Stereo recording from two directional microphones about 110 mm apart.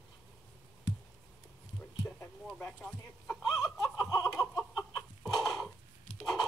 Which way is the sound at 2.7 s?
10° left (ahead or behind).